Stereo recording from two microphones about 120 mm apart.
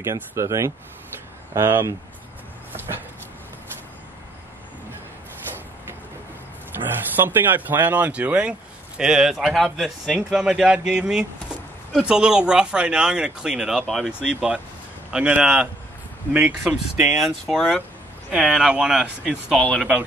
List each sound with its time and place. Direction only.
0.0 s speech: 25° right (ahead or behind)
7.2 s speech: 15° right (ahead or behind); by 20.0 s 5° left (ahead or behind)